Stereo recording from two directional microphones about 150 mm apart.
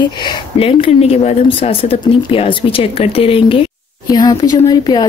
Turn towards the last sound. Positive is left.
turn(degrees=30)  # may be behind; listen again after turning